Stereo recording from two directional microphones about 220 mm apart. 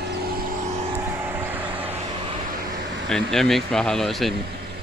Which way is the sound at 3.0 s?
Centre (ahead or behind).